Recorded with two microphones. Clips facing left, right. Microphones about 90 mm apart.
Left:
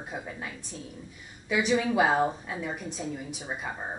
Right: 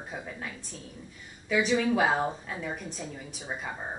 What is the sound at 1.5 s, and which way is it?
A woman's voice, 5° left (ahead or behind).